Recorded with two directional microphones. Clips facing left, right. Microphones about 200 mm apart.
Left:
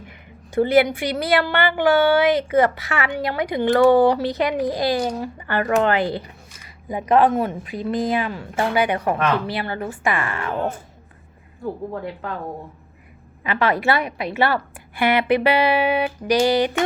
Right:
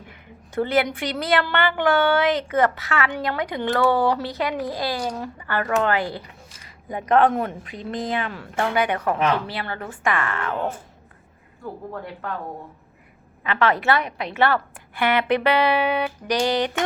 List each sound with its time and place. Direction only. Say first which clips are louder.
0.1 s a sound: left 6 dB; 10° left (ahead or behind)
1.2 s a woman's voice: left 2 dB; 10° left (ahead or behind)
7.1 s a woman's voice: left 2 dB; 5° left (ahead or behind)
13.4 s a woman's voice: left 1 dB; 10° left (ahead or behind)